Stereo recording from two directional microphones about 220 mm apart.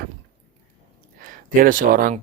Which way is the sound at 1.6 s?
40° right (ahead or behind).